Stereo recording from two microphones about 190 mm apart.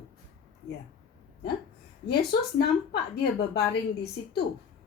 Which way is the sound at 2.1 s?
55° left (ahead or behind).